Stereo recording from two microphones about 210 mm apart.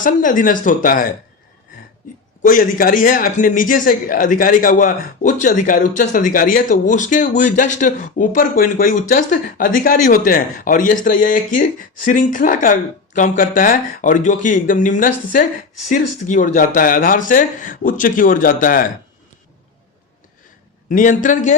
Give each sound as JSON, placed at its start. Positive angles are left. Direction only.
{"t": 0.0, "sound": "a man's voice", "side_deg": 40}
{"t": 2.4, "sound": "a man's voice", "side_deg": 40}
{"t": 20.9, "sound": "a man's voice", "side_deg": 40}